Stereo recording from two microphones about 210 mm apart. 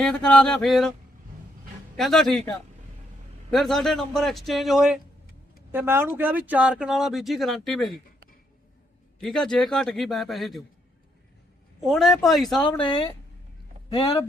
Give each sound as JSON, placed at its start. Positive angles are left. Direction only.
{"t": 0.0, "sound": "speech", "side_deg": 5}
{"t": 2.0, "sound": "speech", "side_deg": 0}
{"t": 9.2, "sound": "speech", "side_deg": 5}
{"t": 11.8, "sound": "speech", "side_deg": 0}
{"t": 12.8, "sound": "speech", "side_deg": 25}